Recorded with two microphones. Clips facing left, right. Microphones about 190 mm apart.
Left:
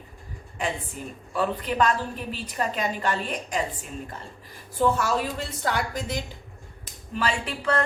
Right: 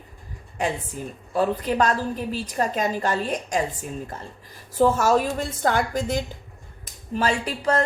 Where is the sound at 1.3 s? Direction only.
40° right (ahead or behind).